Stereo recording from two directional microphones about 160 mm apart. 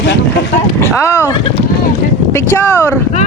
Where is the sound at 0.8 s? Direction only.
15° left (ahead or behind).